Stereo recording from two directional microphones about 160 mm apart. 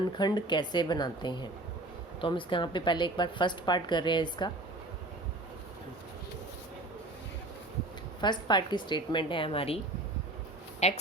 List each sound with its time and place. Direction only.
0.0 s a woman's voice: 30° left (ahead or behind)
8.2 s a woman's voice: 30° left (ahead or behind)
10.8 s speech: 45° left (ahead or behind)